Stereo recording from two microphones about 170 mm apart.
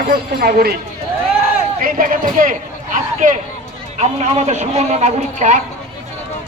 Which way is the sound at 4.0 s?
40° right (ahead or behind).